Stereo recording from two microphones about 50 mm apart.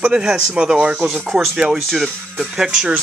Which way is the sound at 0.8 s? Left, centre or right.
Right.